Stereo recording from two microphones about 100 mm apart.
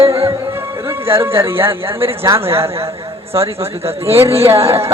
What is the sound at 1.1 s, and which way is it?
Speech, 25° right (ahead or behind).